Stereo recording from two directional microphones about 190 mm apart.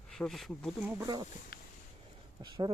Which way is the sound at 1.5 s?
55° left (ahead or behind).